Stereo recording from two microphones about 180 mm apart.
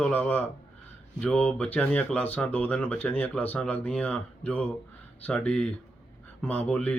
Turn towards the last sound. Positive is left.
turn(degrees=5)  # may be behind; listen again after turning